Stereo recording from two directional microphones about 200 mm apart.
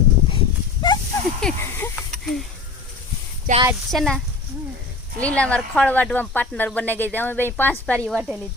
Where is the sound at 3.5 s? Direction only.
40° right (ahead or behind).